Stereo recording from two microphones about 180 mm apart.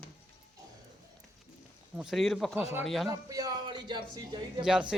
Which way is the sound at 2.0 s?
Centre (ahead or behind).